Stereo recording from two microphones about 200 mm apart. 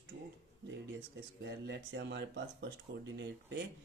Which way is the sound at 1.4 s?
60° right (ahead or behind).